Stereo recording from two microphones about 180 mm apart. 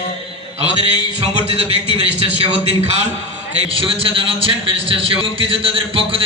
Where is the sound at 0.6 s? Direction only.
35° right (ahead or behind).